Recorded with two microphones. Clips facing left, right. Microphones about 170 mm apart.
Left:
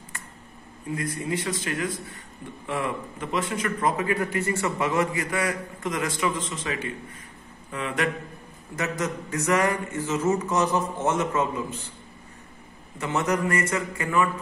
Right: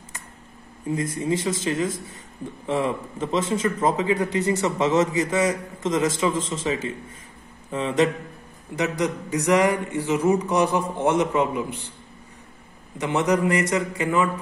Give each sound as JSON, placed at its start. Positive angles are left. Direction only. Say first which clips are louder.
{"t": 0.9, "sound": "a man's voice", "louder": "right 4 dB", "side_deg": -25}
{"t": 13.0, "sound": "speech", "louder": "right 4 dB", "side_deg": -15}